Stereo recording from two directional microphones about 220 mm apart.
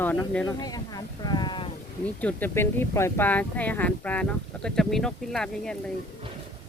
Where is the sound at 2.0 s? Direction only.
5° left (ahead or behind).